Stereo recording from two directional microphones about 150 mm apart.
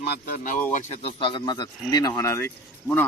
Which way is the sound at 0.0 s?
80° left.